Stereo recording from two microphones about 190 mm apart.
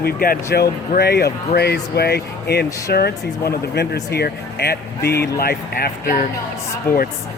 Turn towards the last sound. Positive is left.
turn(degrees=15)  # may be behind; listen again after turning